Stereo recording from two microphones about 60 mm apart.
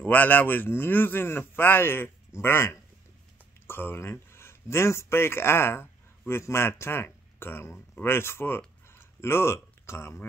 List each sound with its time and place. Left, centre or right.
0.0 s speech: left